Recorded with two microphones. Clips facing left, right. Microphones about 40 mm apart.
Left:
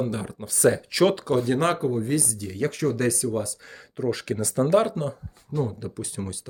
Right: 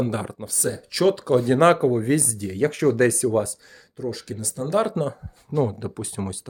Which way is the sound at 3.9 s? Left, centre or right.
Left.